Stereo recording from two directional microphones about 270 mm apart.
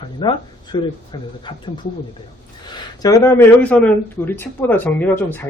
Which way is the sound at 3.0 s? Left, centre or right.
Centre.